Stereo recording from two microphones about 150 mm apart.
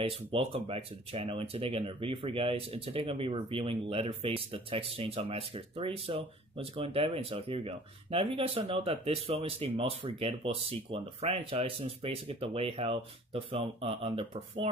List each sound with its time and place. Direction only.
0.0 s speech: 40° right (ahead or behind)